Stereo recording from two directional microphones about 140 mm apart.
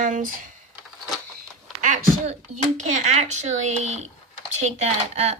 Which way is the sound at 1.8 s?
60° right (ahead or behind).